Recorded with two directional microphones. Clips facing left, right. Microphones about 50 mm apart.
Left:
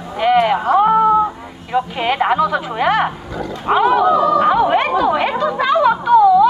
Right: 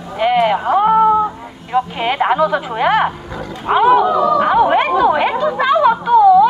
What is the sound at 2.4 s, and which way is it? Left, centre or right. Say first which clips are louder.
Speech: right 1 dB; right.